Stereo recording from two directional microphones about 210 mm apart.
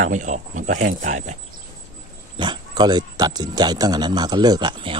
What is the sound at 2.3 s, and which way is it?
Speech, 20° right (ahead or behind).